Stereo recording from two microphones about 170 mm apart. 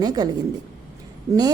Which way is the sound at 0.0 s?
25° right (ahead or behind).